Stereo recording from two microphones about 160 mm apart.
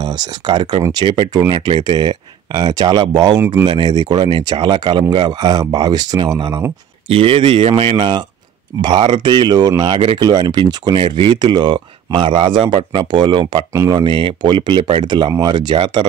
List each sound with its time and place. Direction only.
0.0 s speech: 25° right (ahead or behind)
7.1 s speech: 35° right (ahead or behind)